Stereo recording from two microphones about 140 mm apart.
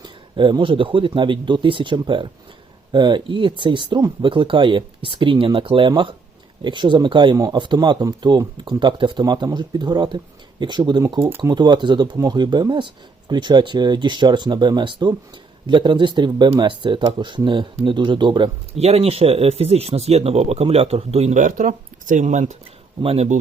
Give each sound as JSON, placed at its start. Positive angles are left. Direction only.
{"t": 0.0, "sound": "speech", "side_deg": -35}
{"t": 18.8, "sound": "speech", "side_deg": -50}
{"t": 23.0, "sound": "speech", "side_deg": -45}